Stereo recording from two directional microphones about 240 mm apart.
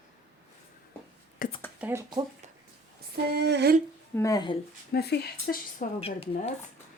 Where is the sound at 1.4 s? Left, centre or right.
Left.